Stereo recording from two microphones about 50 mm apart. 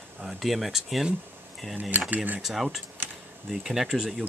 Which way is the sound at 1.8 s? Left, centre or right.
Right.